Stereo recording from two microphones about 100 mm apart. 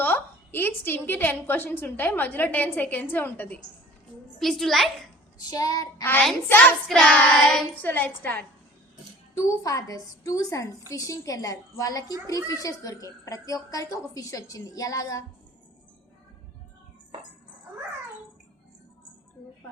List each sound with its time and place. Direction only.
0.0 s a woman's voice: 20° left (ahead or behind)
4.4 s a child's voice: centre (ahead or behind)
5.5 s a woman's voice: 40° left (ahead or behind)
6.5 s a woman's voice: 20° left (ahead or behind)
6.8 s a child's voice: centre (ahead or behind)
7.1 s a woman's voice: 15° left (ahead or behind)
7.3 s a woman's voice: 5° left (ahead or behind)
7.8 s a woman's voice: 20° left (ahead or behind)
9.3 s a woman's voice: 35° left (ahead or behind)